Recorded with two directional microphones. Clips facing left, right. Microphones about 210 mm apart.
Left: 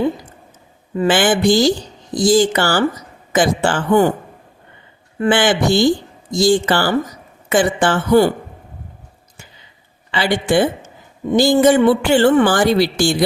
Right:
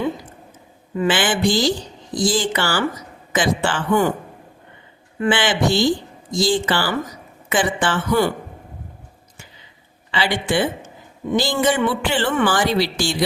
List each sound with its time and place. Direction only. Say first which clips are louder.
0.9 s speech: left 5 dB; 45° left (ahead or behind)
5.2 s speech: left 4 dB; 45° left (ahead or behind)
10.1 s speech: left 4 dB; 45° left (ahead or behind)